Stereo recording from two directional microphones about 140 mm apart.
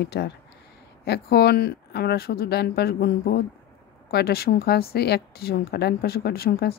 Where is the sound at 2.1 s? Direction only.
90° left.